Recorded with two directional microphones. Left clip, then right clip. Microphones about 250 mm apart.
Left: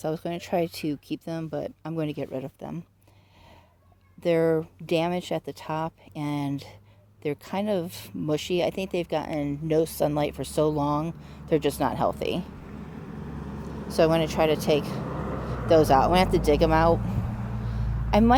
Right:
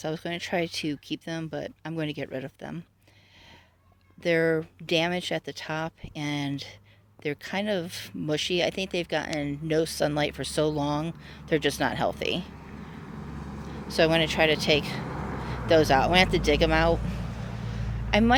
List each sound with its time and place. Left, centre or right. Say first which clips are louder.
0.0 s speech: left 1 dB; centre
4.2 s speech: left 1 dB; centre
13.8 s speech: left 1 dB; centre
18.1 s speech: left 2 dB; centre